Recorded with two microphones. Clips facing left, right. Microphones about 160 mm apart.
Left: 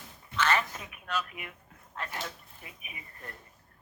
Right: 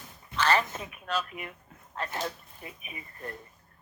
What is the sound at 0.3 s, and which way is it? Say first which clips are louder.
A man's voice: right 2 dB; 35° right (ahead or behind).